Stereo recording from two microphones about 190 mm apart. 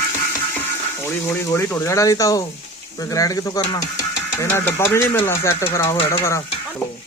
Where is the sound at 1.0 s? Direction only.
10° left (ahead or behind).